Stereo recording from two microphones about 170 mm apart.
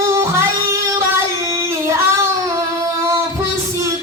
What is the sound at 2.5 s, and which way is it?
Female singing, 15° right (ahead or behind).